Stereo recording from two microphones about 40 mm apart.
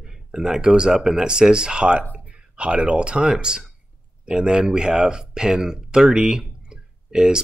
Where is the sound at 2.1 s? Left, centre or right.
Right.